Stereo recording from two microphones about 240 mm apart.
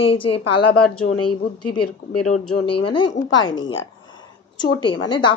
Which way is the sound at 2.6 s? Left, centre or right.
Left.